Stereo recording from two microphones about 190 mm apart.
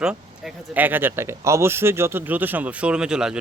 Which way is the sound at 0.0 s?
5° right (ahead or behind).